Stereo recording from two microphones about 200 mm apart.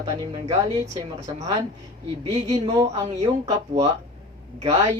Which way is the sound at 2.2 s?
25° right (ahead or behind).